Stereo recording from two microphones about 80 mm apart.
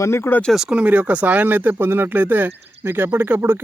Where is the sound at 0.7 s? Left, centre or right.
Centre.